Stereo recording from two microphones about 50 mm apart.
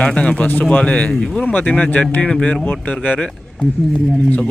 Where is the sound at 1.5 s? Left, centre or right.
Left.